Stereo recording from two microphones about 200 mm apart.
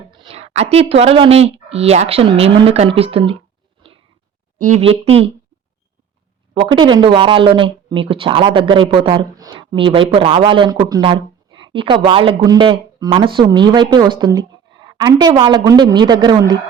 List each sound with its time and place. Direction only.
0.1 s speech: 25° right (ahead or behind)
4.5 s speech: 40° right (ahead or behind)
6.5 s speech: 25° right (ahead or behind)